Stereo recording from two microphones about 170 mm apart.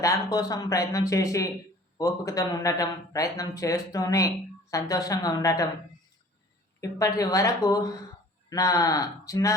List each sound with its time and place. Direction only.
0.0 s a man's voice: 20° left (ahead or behind)
6.8 s a man's voice: 20° left (ahead or behind)